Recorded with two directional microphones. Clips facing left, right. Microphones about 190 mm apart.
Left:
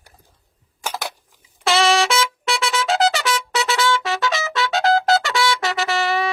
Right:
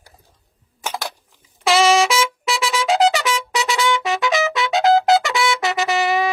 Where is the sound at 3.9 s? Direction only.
20° right (ahead or behind).